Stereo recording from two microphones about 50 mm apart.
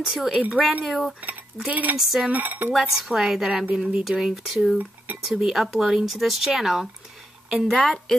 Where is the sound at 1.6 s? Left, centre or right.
Right.